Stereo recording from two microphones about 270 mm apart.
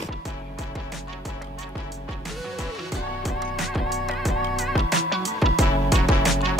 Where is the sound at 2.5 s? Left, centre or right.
Centre.